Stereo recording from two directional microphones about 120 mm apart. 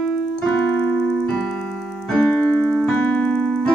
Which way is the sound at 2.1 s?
10° left (ahead or behind).